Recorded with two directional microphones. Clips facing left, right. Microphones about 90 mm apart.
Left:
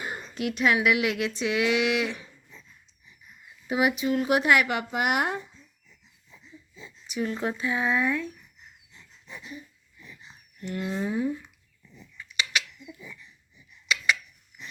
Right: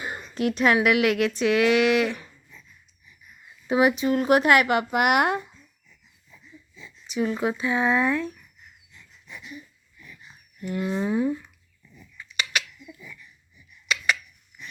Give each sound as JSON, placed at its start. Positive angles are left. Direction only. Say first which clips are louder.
{"t": 0.3, "sound": "speech", "louder": "right 4 dB", "side_deg": -40}
{"t": 0.9, "sound": "speech", "louder": "right 5 dB", "side_deg": -55}
{"t": 2.5, "sound": "a sound", "louder": "left 1 dB", "side_deg": 30}
{"t": 3.7, "sound": "speech", "louder": "right 4 dB", "side_deg": -35}
{"t": 6.3, "sound": "a sound", "louder": "even", "side_deg": 30}
{"t": 7.1, "sound": "speech", "louder": "right 4 dB", "side_deg": -15}
{"t": 8.9, "sound": "dog", "louder": "even", "side_deg": 30}
{"t": 10.6, "sound": "speech", "louder": "right 3 dB", "side_deg": -15}
{"t": 12.8, "sound": "frog", "louder": "even", "side_deg": 20}
{"t": 13.8, "sound": "a sound", "louder": "right 1 dB", "side_deg": -45}